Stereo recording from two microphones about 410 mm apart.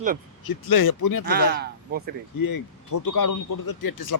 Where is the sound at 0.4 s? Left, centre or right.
Left.